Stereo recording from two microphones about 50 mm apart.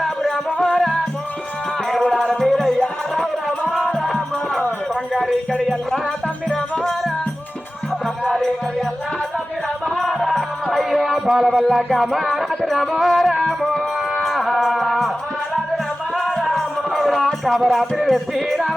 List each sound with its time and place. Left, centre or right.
0.0 s music: centre
2.0 s music: centre
2.5 s music: centre
5.6 s music: centre
9.9 s music: centre
16.1 s music: centre